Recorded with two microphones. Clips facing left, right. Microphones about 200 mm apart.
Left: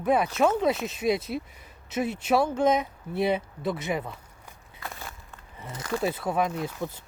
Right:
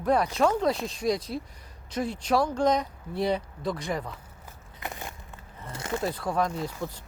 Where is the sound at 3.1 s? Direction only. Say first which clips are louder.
Left 2 dB; 20° left (ahead or behind).